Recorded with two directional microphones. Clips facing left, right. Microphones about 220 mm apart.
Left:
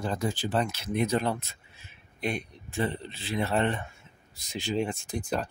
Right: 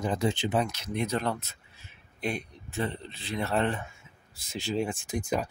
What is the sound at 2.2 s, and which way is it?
Speech, 5° right (ahead or behind).